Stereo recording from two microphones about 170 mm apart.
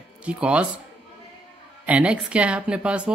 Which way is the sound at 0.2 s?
5° right (ahead or behind).